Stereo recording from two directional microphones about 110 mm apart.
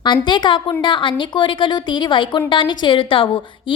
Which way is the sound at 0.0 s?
45° left (ahead or behind).